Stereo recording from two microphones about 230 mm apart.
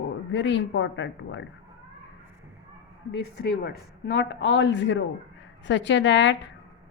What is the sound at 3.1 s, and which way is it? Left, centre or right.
Speech, left.